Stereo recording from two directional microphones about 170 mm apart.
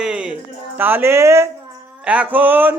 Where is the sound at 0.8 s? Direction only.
10° right (ahead or behind).